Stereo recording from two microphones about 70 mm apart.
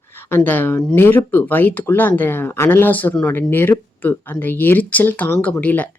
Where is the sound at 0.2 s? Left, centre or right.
Left.